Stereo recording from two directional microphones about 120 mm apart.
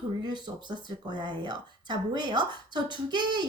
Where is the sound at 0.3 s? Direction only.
40° right (ahead or behind).